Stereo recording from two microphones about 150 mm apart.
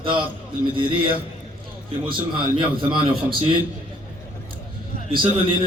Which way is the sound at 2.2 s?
35° right (ahead or behind).